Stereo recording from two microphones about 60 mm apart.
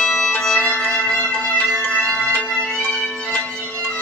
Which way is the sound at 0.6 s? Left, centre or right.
Left.